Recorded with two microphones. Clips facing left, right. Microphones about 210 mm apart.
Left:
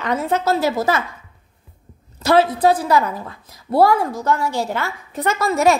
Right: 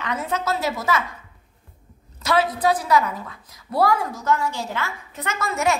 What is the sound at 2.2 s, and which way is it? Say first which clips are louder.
A woman's voice: left 6 dB; 30° left (ahead or behind).